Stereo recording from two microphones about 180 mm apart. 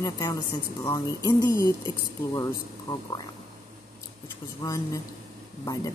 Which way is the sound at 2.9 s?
25° left (ahead or behind).